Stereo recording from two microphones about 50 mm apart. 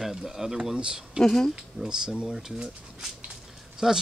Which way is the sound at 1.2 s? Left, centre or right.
Centre.